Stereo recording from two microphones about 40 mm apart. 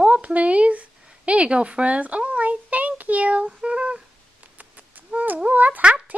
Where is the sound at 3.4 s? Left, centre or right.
Right.